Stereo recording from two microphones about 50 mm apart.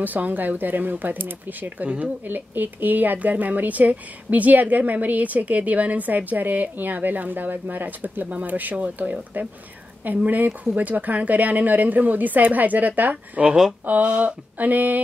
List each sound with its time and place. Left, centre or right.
0.0 s speech: right